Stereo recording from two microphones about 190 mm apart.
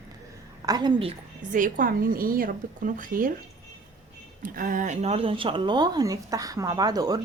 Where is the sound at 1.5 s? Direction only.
45° right (ahead or behind).